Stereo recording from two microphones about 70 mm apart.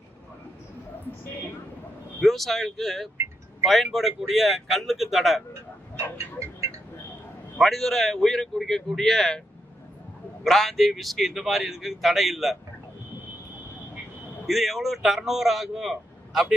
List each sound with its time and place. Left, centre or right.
2.2 s speech: centre
6.1 s music: right
7.6 s speech: centre
10.4 s speech: centre
14.4 s speech: centre